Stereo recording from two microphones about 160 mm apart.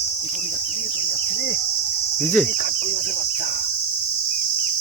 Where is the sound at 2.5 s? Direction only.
65° left (ahead or behind).